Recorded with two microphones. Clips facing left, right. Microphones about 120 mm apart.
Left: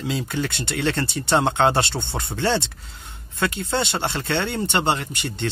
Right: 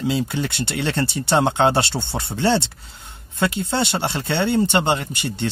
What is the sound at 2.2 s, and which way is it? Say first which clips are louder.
Speech: right 3 dB; 30° right (ahead or behind).